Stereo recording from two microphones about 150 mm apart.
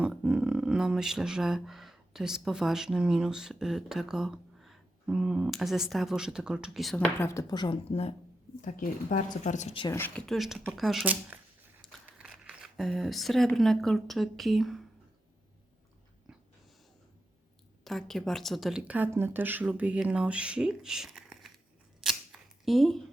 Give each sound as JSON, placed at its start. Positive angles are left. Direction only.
{"t": 0.0, "sound": "speech", "side_deg": -5}
{"t": 7.2, "sound": "speech", "side_deg": 20}
{"t": 8.6, "sound": "speech", "side_deg": 65}
{"t": 9.9, "sound": "speech", "side_deg": 15}
{"t": 10.2, "sound": "speech", "side_deg": 0}
{"t": 17.8, "sound": "speech", "side_deg": 0}
{"t": 22.0, "sound": "a sound", "side_deg": 0}